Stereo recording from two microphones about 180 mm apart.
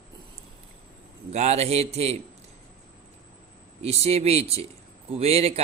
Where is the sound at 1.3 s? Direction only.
35° right (ahead or behind).